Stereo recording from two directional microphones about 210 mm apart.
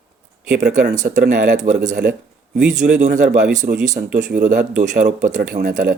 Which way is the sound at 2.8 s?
35° right (ahead or behind).